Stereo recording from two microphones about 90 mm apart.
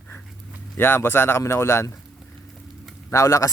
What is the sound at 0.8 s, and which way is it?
Speech, 25° left (ahead or behind).